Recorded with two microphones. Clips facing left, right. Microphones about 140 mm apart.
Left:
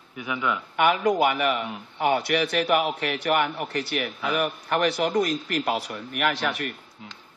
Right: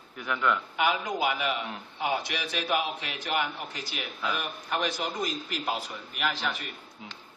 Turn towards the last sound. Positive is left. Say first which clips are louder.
# left 6 dB
turn(degrees=70)  # may be behind; listen again after turning